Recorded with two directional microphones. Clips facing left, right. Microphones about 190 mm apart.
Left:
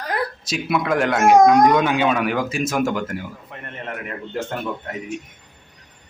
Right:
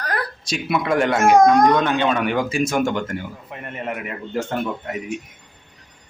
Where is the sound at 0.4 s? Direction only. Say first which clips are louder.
Right 1 dB; centre (ahead or behind).